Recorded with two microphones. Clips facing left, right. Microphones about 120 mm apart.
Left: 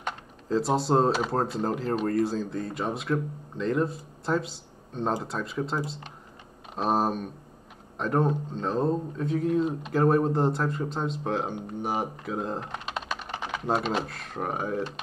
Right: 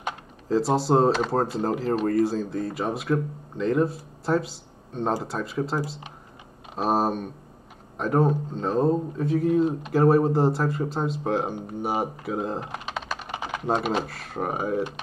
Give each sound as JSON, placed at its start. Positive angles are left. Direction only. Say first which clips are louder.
{"t": 0.0, "sound": "speech", "louder": "right 2 dB", "side_deg": 0}